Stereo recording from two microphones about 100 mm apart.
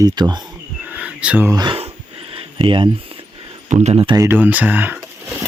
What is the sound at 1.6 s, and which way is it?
Speech, 65° right (ahead or behind).